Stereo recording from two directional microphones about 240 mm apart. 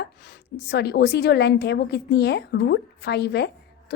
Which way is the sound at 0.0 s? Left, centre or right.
Left.